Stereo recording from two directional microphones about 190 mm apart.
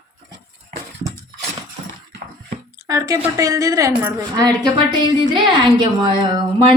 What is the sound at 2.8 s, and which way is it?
A woman's voice, 15° right (ahead or behind).